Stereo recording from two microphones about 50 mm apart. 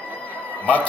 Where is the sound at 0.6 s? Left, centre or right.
Left.